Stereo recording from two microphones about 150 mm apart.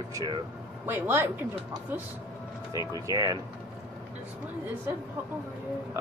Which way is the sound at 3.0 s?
25° right (ahead or behind).